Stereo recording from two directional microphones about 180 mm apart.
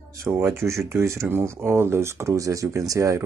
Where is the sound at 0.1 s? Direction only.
15° right (ahead or behind).